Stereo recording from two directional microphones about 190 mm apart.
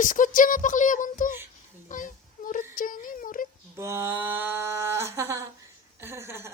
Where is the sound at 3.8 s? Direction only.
15° right (ahead or behind).